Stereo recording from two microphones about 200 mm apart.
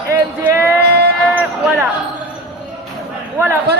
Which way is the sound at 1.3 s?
5° right (ahead or behind).